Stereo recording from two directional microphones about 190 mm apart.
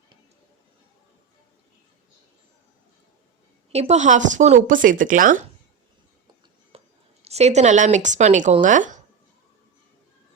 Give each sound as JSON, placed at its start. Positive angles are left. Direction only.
{"t": 3.7, "sound": "speech", "side_deg": -35}
{"t": 6.7, "sound": "speech", "side_deg": -35}